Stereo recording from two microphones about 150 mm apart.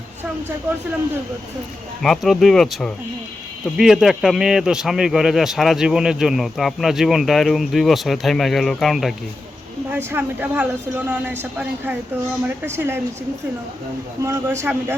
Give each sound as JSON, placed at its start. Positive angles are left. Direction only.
{"t": 2.0, "sound": "speech", "side_deg": 0}
{"t": 9.9, "sound": "speech", "side_deg": -15}
{"t": 14.2, "sound": "speech", "side_deg": -20}